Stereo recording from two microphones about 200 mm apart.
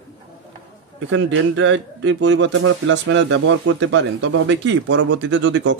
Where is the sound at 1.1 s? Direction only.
70° right (ahead or behind).